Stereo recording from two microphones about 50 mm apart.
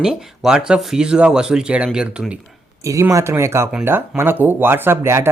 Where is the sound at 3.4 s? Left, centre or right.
Right.